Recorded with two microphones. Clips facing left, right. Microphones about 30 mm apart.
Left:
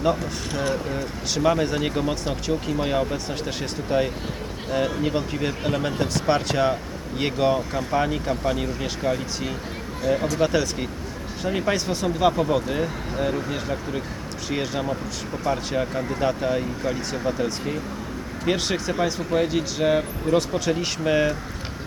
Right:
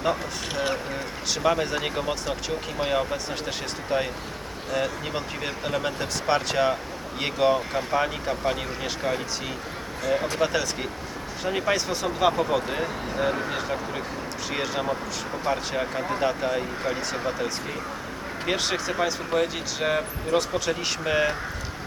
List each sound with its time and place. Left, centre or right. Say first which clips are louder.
0.0 s speech: left 3 dB; centre
0.6 s speech: left 3 dB; right
1.3 s speech: left 2 dB; centre